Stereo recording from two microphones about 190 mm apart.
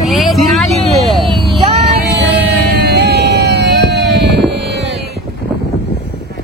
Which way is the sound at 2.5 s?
60° right (ahead or behind).